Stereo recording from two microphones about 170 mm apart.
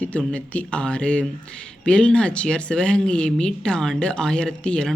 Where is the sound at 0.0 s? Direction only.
5° left (ahead or behind).